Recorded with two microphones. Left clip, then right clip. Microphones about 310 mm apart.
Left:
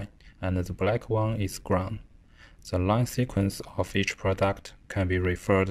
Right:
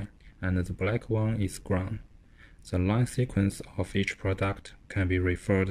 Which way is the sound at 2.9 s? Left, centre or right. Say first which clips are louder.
Left 5 dB; centre.